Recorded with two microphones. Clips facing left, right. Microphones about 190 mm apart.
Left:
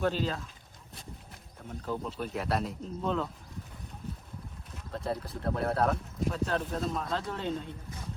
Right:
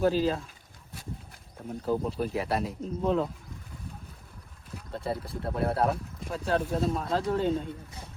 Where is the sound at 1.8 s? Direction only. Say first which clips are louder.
Right 6 dB; 30° right (ahead or behind).